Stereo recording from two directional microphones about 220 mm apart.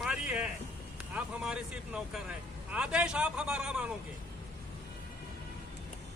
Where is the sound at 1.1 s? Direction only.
5° right (ahead or behind).